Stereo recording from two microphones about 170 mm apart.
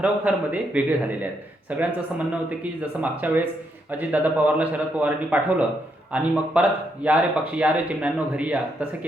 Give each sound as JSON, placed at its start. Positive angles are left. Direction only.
{"t": 0.0, "sound": "speech", "side_deg": -10}